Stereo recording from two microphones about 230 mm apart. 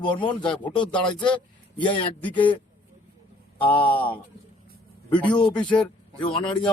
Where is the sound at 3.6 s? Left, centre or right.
Centre.